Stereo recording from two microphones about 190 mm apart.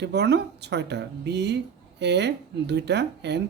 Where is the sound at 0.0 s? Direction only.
60° right (ahead or behind).